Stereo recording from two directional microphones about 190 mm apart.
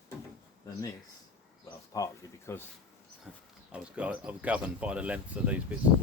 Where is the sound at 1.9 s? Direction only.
15° left (ahead or behind).